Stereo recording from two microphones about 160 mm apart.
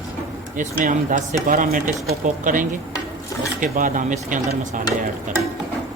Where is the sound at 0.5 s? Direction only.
55° right (ahead or behind).